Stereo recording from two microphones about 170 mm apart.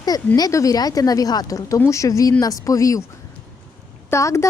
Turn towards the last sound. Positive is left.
turn(degrees=15)  # may be behind; listen again after turning